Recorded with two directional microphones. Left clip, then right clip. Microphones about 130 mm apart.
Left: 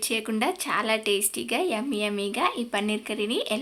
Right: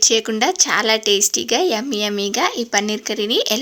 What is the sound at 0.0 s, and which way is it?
Speech, 35° right (ahead or behind).